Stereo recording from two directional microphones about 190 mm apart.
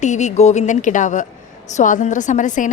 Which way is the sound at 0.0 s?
40° left (ahead or behind).